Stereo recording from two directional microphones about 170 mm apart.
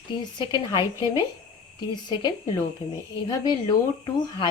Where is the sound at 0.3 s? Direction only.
25° left (ahead or behind).